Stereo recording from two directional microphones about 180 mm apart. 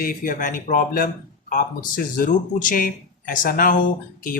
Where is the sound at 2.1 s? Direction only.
50° left (ahead or behind).